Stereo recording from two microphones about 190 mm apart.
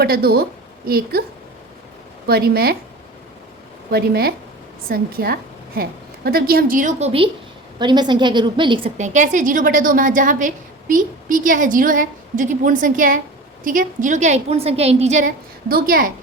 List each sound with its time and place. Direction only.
0.0 s a woman's voice: 55° right (ahead or behind)
2.2 s a woman's voice: 55° right (ahead or behind)
3.9 s a woman's voice: 55° right (ahead or behind); by 8.9 s 25° right (ahead or behind)
9.0 s a woman's voice: 40° right (ahead or behind)
15.7 s a woman's voice: 45° right (ahead or behind)